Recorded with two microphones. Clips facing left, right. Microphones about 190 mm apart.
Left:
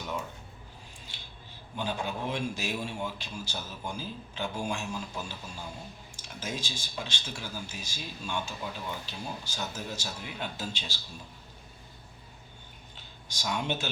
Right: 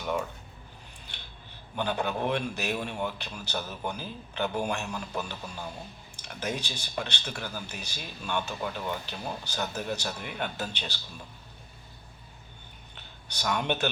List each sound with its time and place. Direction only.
1.1 s scissors: 65° right (ahead or behind)
1.7 s speech: 60° right (ahead or behind)
13.0 s speech: 60° right (ahead or behind)